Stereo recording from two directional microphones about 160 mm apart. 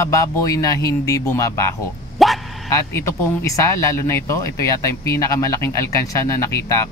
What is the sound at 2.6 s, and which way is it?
Speech, 15° left (ahead or behind).